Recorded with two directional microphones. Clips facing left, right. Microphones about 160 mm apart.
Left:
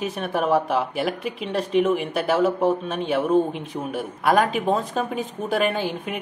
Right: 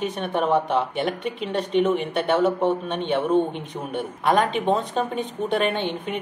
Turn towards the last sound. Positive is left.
turn(degrees=5)  # may be behind; listen again after turning